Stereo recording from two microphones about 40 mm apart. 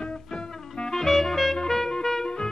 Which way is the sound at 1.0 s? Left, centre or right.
Centre.